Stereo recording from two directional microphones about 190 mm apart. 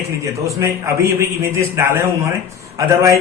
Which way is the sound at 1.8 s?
15° right (ahead or behind).